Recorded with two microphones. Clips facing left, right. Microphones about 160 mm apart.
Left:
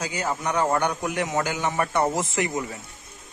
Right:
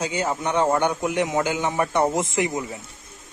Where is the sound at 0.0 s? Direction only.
25° right (ahead or behind).